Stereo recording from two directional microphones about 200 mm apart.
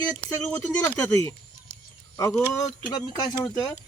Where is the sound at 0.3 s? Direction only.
10° left (ahead or behind).